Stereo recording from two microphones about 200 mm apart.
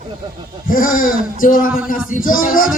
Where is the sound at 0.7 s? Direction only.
45° left (ahead or behind).